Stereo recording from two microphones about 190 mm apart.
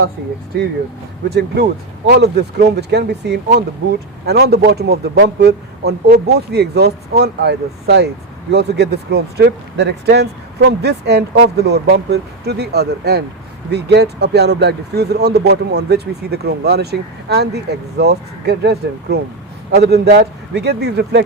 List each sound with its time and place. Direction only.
2.0 s a man's voice: 60° right (ahead or behind)